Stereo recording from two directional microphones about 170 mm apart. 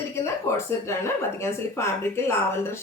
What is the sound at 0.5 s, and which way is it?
A woman's voice, 15° left (ahead or behind).